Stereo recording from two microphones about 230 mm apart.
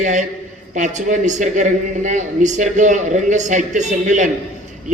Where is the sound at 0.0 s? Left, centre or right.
Right.